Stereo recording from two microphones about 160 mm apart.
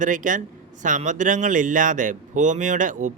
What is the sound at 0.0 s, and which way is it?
Speech, 55° right (ahead or behind).